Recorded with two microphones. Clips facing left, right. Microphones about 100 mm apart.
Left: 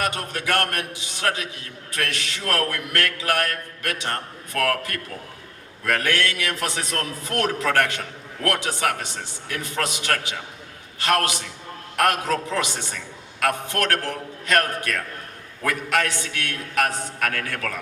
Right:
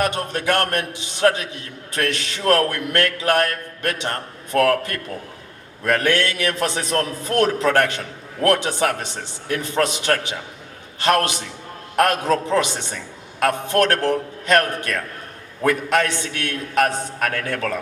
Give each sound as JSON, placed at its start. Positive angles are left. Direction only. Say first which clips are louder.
{"t": 0.0, "sound": "a man's voice", "louder": "right 5 dB", "side_deg": -30}